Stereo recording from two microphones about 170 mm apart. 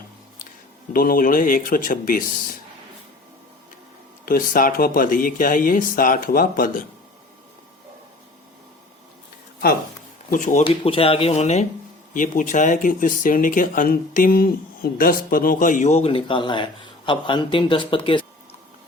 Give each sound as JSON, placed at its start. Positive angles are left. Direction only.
{"t": 0.9, "sound": "speech", "side_deg": 55}
{"t": 4.3, "sound": "speech", "side_deg": 55}
{"t": 10.2, "sound": "speech", "side_deg": 50}
{"t": 10.6, "sound": "speech", "side_deg": 30}
{"t": 12.1, "sound": "speech", "side_deg": 50}